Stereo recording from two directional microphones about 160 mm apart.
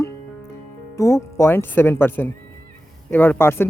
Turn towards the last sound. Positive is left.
turn(degrees=15)  # may be behind; listen again after turning